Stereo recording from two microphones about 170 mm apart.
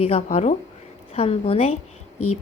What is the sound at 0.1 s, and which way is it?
A woman's voice, 40° left (ahead or behind).